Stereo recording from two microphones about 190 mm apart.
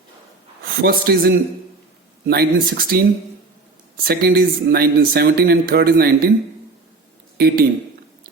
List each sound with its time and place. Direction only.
0.6 s a man's voice: 50° right (ahead or behind)
7.3 s speech: 55° right (ahead or behind)